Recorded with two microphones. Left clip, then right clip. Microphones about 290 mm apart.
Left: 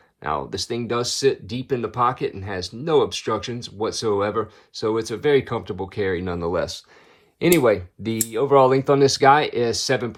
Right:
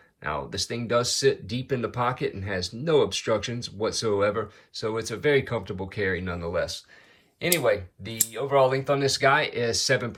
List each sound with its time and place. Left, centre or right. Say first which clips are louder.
0.2 s speech: left 4 dB; centre